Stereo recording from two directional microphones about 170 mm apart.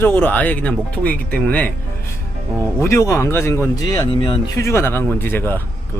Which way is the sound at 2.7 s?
15° left (ahead or behind).